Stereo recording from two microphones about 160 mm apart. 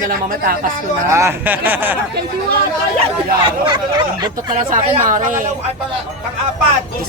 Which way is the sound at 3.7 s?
25° right (ahead or behind).